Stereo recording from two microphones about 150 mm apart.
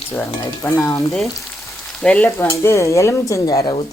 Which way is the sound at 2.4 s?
20° left (ahead or behind).